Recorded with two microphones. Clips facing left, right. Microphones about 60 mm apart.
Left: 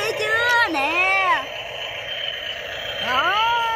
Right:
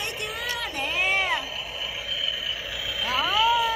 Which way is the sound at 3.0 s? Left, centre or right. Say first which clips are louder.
Left 5 dB; left.